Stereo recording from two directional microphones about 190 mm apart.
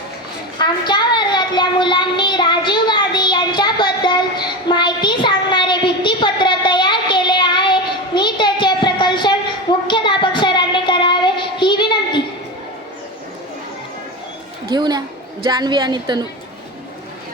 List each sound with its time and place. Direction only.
0.6 s child singing: 20° left (ahead or behind)
14.7 s a sound: 20° right (ahead or behind)
15.4 s a woman's voice: 20° right (ahead or behind)